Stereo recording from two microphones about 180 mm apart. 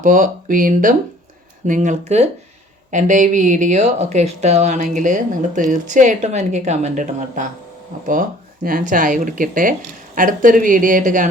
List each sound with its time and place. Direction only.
0.0 s speech: 50° right (ahead or behind)
8.6 s speech: 50° right (ahead or behind)